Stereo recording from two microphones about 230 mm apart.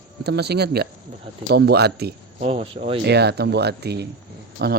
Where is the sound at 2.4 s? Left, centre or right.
Right.